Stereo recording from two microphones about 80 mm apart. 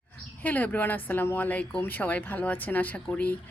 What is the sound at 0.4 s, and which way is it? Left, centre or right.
Speech, left.